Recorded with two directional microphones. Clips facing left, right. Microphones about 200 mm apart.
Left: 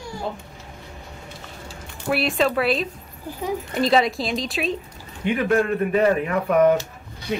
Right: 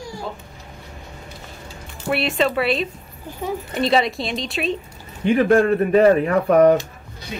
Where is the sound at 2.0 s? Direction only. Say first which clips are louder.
Right 1 dB; centre (ahead or behind).